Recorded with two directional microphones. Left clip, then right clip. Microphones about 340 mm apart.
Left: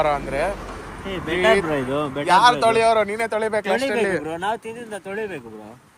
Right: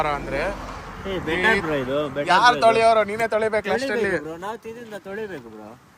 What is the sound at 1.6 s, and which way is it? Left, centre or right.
Speech, centre.